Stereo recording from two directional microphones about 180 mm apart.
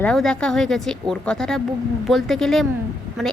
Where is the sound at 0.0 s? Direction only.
5° left (ahead or behind).